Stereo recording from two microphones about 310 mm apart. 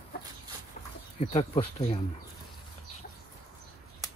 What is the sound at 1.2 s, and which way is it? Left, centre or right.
Speech, centre.